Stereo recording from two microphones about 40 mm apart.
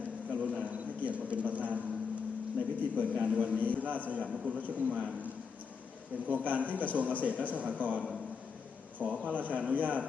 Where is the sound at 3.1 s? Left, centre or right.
Right.